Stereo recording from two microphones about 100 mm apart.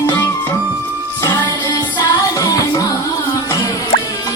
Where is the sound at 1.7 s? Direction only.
40° left (ahead or behind).